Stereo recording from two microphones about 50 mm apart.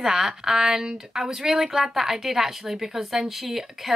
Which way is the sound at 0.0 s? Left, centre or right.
Centre.